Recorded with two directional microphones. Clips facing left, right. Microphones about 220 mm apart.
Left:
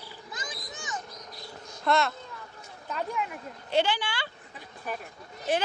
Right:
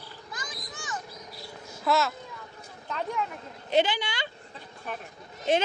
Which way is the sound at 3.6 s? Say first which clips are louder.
Right 2 dB; 20° right (ahead or behind).